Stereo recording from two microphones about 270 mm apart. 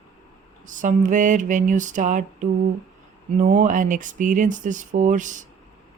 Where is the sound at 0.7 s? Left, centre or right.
Right.